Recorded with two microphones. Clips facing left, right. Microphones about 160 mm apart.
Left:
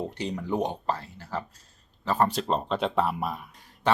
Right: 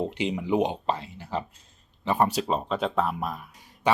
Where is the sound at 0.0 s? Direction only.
20° right (ahead or behind).